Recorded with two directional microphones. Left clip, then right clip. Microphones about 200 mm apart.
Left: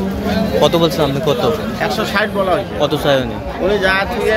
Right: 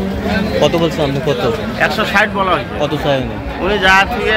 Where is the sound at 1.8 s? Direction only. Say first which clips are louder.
Right 7 dB; 10° left (ahead or behind).